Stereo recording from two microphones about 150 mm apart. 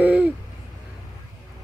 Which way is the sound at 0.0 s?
10° right (ahead or behind).